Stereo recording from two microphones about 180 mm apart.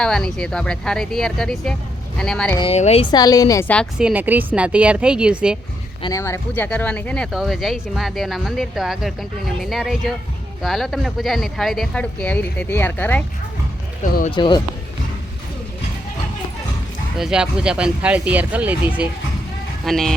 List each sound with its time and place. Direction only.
0.0 s speech: 5° left (ahead or behind)
2.6 s speech: 35° left (ahead or behind); by 3.7 s 20° left (ahead or behind)
3.9 s speech: 5° right (ahead or behind)
6.0 s speech: 20° left (ahead or behind)
14.0 s speech: 50° left (ahead or behind)
14.3 s speech: 25° left (ahead or behind)
17.2 s speech: 5° right (ahead or behind)